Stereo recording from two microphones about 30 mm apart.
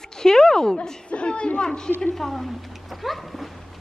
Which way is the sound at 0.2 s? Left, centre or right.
Left.